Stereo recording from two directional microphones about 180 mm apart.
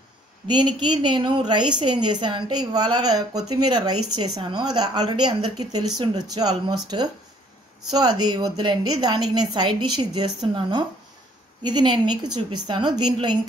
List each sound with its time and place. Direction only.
0.5 s a woman's voice: 25° right (ahead or behind)